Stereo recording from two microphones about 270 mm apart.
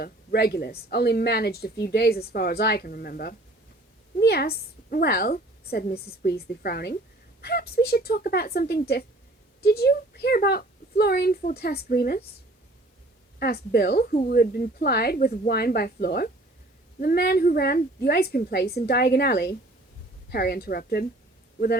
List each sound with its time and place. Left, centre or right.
0.0 s a woman's voice: left
13.4 s a woman's voice: left